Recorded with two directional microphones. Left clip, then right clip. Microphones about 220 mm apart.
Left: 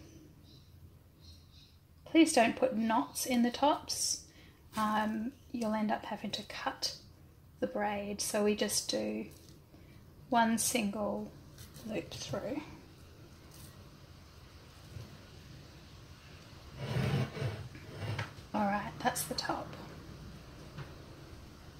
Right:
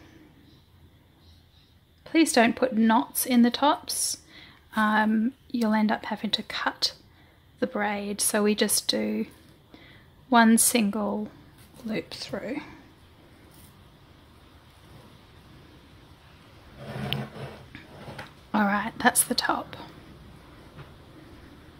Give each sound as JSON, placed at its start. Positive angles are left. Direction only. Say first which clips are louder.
{"t": 2.0, "sound": "speech", "louder": "right 5 dB", "side_deg": -30}
{"t": 10.3, "sound": "speech", "louder": "right 9 dB", "side_deg": -35}
{"t": 10.9, "sound": "speech", "louder": "right 6 dB", "side_deg": -45}
{"t": 11.9, "sound": "speech", "louder": "right 6 dB", "side_deg": -30}
{"t": 18.5, "sound": "a sound", "louder": "right 9 dB", "side_deg": -35}